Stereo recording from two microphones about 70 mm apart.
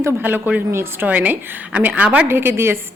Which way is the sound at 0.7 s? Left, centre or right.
Right.